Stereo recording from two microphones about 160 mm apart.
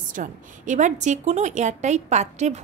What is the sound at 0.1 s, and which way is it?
A woman's voice, 55° right (ahead or behind).